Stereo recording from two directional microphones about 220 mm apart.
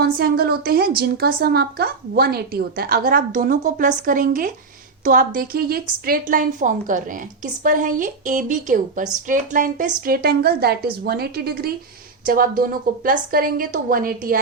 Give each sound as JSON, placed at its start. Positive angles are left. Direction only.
{"t": 0.0, "sound": "a woman's voice", "side_deg": -45}